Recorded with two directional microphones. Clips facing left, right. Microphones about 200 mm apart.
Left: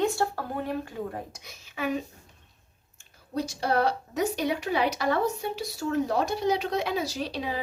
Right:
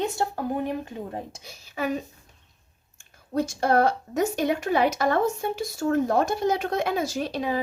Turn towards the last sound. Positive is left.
turn(degrees=-50)  # may be behind; listen again after turning